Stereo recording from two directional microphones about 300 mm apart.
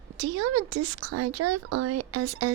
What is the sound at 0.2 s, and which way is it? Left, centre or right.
A woman's voice, right.